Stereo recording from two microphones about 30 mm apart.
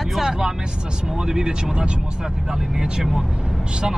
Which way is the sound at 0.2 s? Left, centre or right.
Centre.